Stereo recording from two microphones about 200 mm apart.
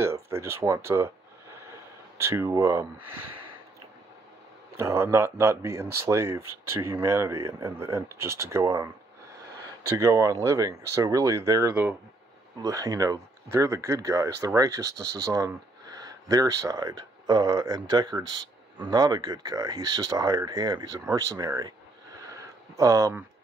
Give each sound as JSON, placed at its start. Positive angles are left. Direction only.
{"t": 0.0, "sound": "speech", "side_deg": -15}
{"t": 2.1, "sound": "speech", "side_deg": -15}
{"t": 4.7, "sound": "speech", "side_deg": -15}
{"t": 22.8, "sound": "speech", "side_deg": -15}